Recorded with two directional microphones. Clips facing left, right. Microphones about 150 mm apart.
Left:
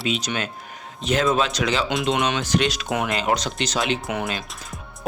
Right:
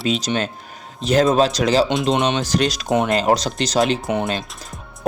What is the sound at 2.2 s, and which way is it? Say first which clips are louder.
Speech: right 4 dB; 25° right (ahead or behind).